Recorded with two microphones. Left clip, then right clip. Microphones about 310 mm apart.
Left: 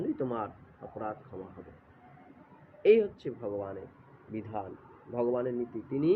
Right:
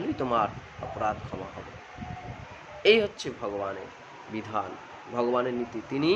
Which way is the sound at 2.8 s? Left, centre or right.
Centre.